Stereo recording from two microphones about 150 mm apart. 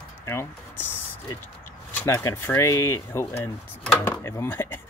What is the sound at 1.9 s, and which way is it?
Speech, 20° left (ahead or behind).